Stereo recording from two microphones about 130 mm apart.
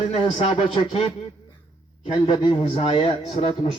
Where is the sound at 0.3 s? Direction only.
45° left (ahead or behind).